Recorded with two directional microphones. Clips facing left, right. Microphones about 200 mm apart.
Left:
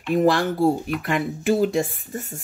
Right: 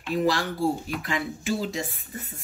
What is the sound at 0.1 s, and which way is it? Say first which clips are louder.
Speech: left 6 dB; 50° left (ahead or behind).